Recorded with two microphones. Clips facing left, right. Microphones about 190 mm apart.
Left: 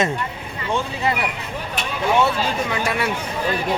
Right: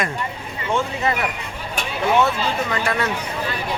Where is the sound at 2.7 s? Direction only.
10° left (ahead or behind).